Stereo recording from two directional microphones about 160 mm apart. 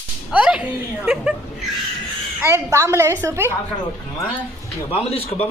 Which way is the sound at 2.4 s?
15° right (ahead or behind).